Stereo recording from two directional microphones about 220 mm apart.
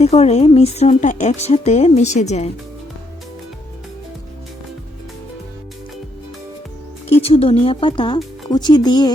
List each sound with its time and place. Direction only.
0.0 s speech: 30° left (ahead or behind)
7.1 s speech: 25° left (ahead or behind)